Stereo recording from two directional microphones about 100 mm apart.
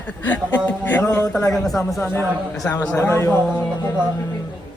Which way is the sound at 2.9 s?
25° left (ahead or behind).